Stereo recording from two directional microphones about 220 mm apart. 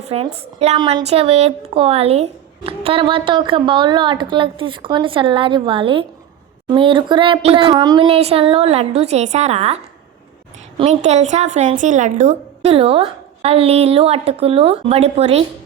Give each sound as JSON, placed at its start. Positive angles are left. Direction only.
{"t": 0.0, "sound": "a woman's voice", "side_deg": -25}
{"t": 10.8, "sound": "a woman's voice", "side_deg": -30}